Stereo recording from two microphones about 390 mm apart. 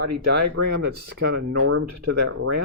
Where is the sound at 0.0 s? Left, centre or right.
Right.